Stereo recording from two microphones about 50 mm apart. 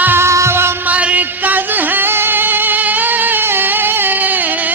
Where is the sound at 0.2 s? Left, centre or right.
Right.